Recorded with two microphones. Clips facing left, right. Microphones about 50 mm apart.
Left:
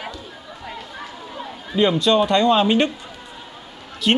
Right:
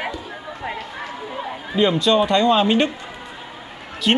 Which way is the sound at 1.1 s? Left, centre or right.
Right.